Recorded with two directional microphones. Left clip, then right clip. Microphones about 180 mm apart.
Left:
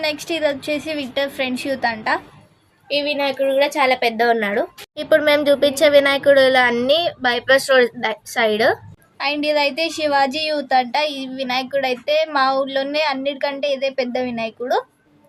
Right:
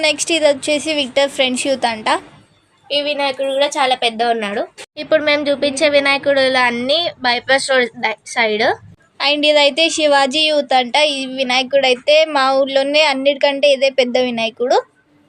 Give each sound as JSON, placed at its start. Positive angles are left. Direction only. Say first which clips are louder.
{"t": 0.0, "sound": "a woman's voice", "louder": "right 6 dB", "side_deg": -25}
{"t": 2.9, "sound": "a woman's voice", "louder": "right 2 dB", "side_deg": -5}
{"t": 9.1, "sound": "a woman's voice", "louder": "right 6 dB", "side_deg": -20}